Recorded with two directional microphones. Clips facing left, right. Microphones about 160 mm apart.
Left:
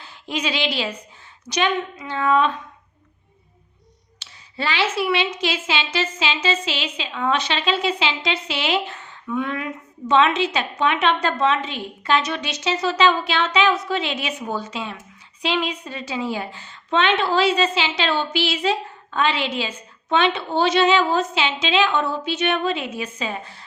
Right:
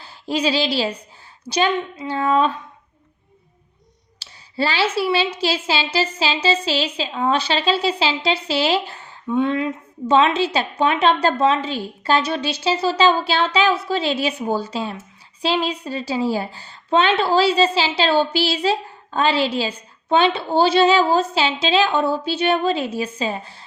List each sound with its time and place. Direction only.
0.0 s a woman's voice: 35° right (ahead or behind)
4.2 s a woman's voice: 35° right (ahead or behind)